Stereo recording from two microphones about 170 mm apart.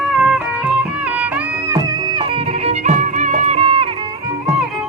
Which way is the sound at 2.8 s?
45° right (ahead or behind).